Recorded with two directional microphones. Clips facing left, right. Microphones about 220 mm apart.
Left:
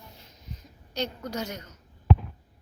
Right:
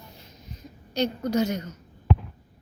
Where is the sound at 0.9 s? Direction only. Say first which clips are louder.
Right 8 dB; 15° right (ahead or behind).